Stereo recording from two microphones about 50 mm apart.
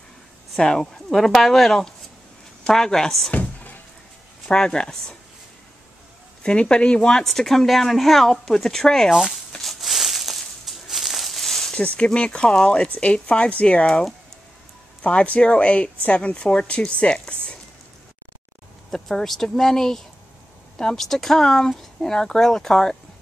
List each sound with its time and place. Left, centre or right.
0.6 s speech: centre
3.3 s a sound: left
4.5 s speech: centre
6.4 s speech: centre
7.2 s speech: centre
9.1 s speech: centre
9.6 s a sound: centre
11.7 s speech: centre
18.9 s speech: centre